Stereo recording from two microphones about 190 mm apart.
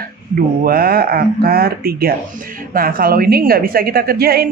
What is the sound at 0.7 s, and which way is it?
A woman's voice, 50° right (ahead or behind).